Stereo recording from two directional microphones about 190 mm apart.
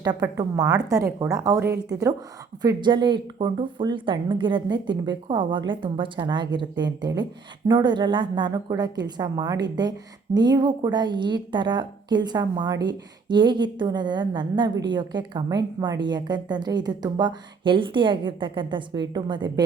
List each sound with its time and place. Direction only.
0.0 s a woman's voice: 20° right (ahead or behind)